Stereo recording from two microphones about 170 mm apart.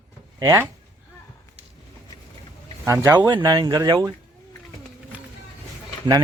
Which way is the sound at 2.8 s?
15° right (ahead or behind).